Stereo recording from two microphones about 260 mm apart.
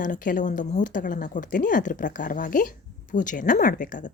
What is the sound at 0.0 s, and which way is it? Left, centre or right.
A woman's voice, left.